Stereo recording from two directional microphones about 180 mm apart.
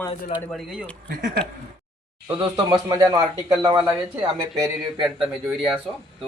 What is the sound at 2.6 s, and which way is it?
Speech, 20° right (ahead or behind).